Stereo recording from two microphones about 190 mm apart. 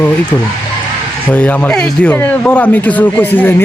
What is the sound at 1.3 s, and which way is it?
Speech, 10° left (ahead or behind).